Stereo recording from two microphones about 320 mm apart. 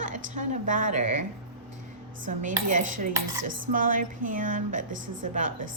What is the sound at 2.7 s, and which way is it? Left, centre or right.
A woman's voice, right.